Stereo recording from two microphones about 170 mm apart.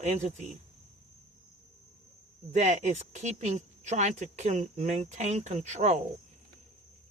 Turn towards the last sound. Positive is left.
turn(degrees=-45)  # may be behind; listen again after turning